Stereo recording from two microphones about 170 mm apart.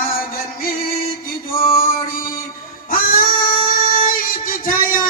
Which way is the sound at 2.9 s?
55° left (ahead or behind).